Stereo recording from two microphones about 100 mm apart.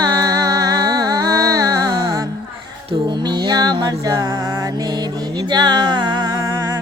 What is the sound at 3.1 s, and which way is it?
Music, 50° right (ahead or behind).